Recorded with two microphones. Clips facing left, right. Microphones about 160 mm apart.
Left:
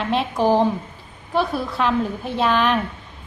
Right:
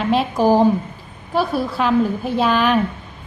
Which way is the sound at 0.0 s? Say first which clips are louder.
Right 3 dB; centre (ahead or behind).